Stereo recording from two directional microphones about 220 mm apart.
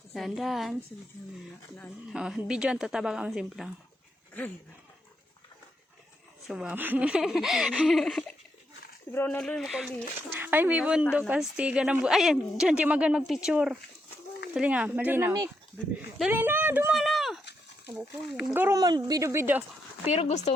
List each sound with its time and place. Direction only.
0.1 s a woman's voice: centre (ahead or behind)
2.1 s a woman's voice: 5° right (ahead or behind)
6.5 s a woman's voice: 5° right (ahead or behind)
18.5 s speech: 10° right (ahead or behind)
20.1 s speech: 30° left (ahead or behind)